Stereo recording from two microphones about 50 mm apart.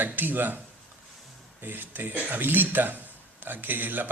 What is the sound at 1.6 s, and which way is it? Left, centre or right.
Speech, right.